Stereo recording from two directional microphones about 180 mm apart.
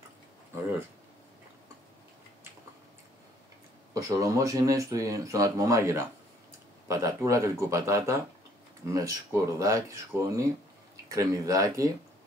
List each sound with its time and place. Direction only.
3.9 s speech: 20° right (ahead or behind)